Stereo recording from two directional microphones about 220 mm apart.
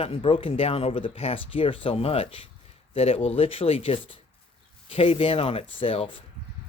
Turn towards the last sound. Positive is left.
turn(degrees=25)  # may be behind; listen again after turning